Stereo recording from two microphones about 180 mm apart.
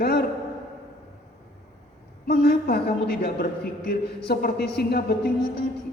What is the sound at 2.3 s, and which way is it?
Speech, 60° left (ahead or behind).